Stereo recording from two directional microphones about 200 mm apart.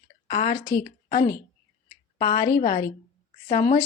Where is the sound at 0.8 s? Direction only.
45° left (ahead or behind).